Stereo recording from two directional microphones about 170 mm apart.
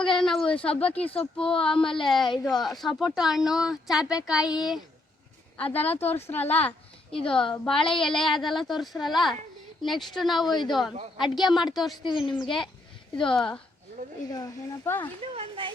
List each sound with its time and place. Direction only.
0.0 s speech: centre (ahead or behind)
4.4 s speech: 25° left (ahead or behind)
5.5 s a woman's voice: 10° left (ahead or behind)
12.0 s speech: 25° left (ahead or behind)
12.5 s speech: 5° left (ahead or behind)
14.3 s speech: 20° left (ahead or behind)
15.2 s speech: 30° right (ahead or behind)